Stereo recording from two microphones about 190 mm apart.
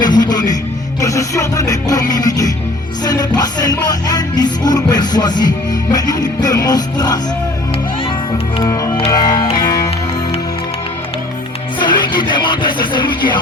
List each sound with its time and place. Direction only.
0.0 s music: 20° left (ahead or behind)
8.6 s music: 15° left (ahead or behind)
11.8 s music: 25° left (ahead or behind)